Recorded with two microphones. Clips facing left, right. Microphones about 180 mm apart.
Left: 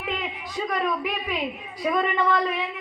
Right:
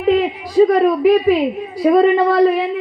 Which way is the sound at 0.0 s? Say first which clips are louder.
Right 16 dB; 35° right (ahead or behind).